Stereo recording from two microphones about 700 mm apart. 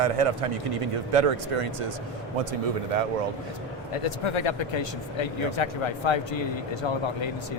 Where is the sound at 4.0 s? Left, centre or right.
Left.